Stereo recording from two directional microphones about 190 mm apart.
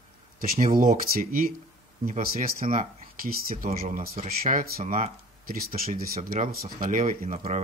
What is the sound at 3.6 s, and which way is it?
Speech, 35° right (ahead or behind).